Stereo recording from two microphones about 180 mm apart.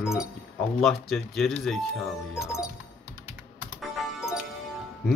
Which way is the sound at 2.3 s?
15° left (ahead or behind).